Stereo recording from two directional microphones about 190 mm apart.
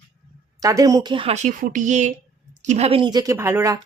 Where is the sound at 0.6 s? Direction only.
20° right (ahead or behind).